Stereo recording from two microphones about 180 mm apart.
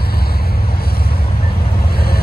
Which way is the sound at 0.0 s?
60° left (ahead or behind).